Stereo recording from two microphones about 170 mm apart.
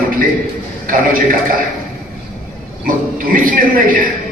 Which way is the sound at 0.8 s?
55° right (ahead or behind).